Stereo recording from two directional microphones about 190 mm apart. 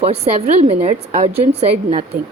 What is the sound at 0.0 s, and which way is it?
A woman's voice, 30° right (ahead or behind).